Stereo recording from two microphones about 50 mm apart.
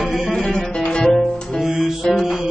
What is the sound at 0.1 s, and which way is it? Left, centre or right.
Music, centre.